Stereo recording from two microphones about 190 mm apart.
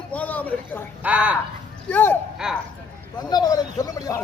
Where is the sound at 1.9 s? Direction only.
10° left (ahead or behind).